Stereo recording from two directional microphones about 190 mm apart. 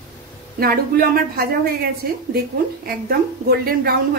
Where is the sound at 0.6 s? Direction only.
50° right (ahead or behind).